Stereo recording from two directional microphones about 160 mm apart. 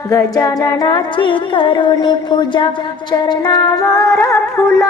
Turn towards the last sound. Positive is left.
turn(degrees=15)  # may be behind; listen again after turning